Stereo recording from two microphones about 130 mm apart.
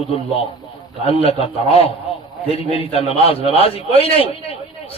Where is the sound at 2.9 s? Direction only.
50° left (ahead or behind).